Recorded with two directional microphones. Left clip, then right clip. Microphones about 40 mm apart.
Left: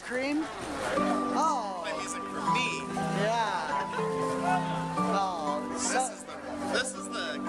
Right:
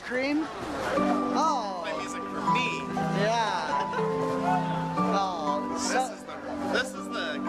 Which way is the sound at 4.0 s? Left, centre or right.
Left.